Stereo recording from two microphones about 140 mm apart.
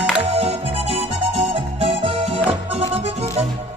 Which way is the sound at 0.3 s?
45° right (ahead or behind).